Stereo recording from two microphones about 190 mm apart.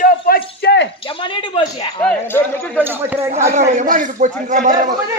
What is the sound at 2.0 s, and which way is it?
Speech, 10° left (ahead or behind).